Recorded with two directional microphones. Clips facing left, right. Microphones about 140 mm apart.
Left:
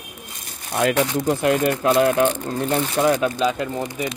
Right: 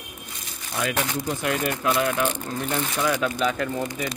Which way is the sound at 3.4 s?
20° left (ahead or behind).